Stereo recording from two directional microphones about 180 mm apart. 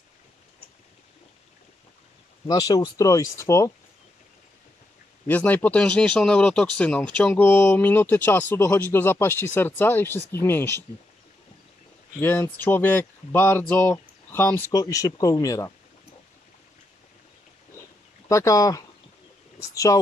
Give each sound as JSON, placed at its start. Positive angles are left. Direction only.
{"t": 2.4, "sound": "speech", "side_deg": 20}
{"t": 5.2, "sound": "speech", "side_deg": 10}
{"t": 12.2, "sound": "speech", "side_deg": 10}
{"t": 18.3, "sound": "speech", "side_deg": 15}